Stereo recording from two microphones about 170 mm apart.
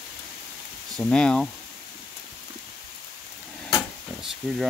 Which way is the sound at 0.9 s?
5° left (ahead or behind).